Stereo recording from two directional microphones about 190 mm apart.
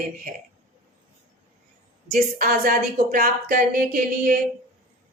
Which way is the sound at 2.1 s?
50° right (ahead or behind).